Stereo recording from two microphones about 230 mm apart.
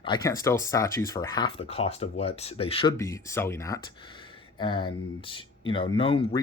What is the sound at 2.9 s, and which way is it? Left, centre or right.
Speech, centre.